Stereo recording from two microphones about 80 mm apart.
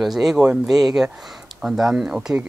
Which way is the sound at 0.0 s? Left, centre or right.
Centre.